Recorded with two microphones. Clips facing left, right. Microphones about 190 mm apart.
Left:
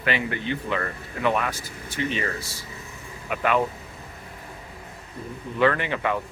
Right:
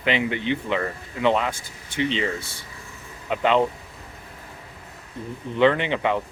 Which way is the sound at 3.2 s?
20° right (ahead or behind).